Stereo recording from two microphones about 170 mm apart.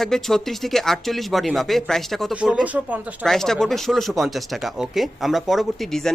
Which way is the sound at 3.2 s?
Centre (ahead or behind).